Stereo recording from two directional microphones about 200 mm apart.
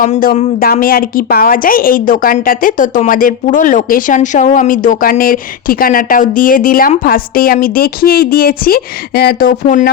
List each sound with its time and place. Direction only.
0.0 s a woman's voice: 40° left (ahead or behind)